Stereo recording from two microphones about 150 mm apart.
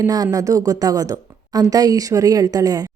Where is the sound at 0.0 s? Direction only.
25° right (ahead or behind).